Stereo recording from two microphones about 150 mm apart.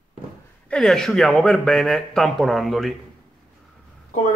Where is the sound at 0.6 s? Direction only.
5° left (ahead or behind).